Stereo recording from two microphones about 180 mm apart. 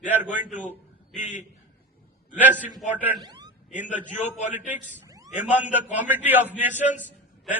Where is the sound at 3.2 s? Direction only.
25° right (ahead or behind).